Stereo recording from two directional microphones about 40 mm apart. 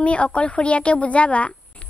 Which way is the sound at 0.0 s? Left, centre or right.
Left.